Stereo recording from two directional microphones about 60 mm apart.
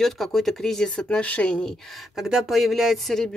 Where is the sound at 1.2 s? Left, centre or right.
Left.